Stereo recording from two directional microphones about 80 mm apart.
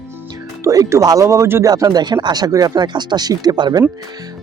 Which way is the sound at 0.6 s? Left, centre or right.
Right.